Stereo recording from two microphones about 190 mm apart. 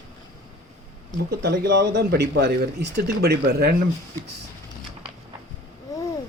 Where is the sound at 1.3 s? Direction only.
55° right (ahead or behind).